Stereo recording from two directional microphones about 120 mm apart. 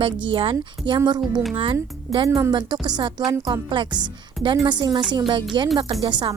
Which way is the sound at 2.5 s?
40° right (ahead or behind).